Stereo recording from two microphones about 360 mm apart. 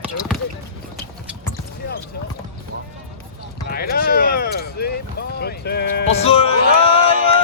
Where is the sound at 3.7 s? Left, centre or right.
Left.